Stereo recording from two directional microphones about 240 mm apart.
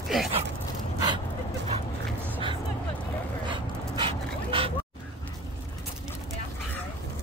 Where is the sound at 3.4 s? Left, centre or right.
Right.